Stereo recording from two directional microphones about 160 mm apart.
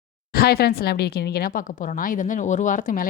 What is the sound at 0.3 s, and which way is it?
A woman's voice, 75° left (ahead or behind).